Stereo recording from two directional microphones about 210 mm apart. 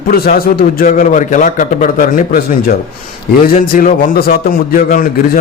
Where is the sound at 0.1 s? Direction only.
45° left (ahead or behind).